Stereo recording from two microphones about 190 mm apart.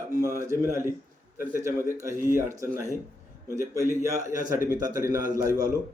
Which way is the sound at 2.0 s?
15° right (ahead or behind).